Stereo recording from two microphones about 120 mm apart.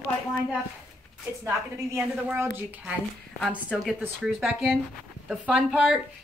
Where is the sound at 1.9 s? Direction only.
15° right (ahead or behind).